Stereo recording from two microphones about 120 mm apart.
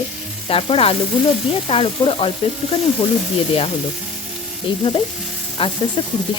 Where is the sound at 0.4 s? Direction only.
50° left (ahead or behind).